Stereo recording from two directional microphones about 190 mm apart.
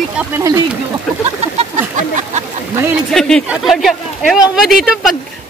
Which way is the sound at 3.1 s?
Centre (ahead or behind).